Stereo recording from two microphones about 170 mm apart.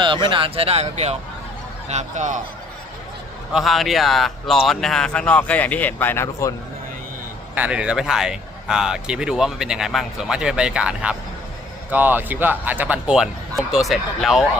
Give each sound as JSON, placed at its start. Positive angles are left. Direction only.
{"t": 0.0, "sound": "speech", "side_deg": -30}
{"t": 3.5, "sound": "a man's voice", "side_deg": 0}
{"t": 7.5, "sound": "a man's voice", "side_deg": -10}